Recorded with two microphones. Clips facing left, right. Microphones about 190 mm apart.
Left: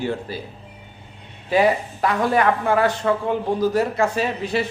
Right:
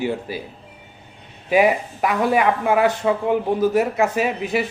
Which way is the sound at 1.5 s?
15° right (ahead or behind).